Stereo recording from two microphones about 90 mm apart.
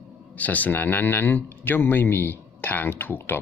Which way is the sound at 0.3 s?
20° left (ahead or behind).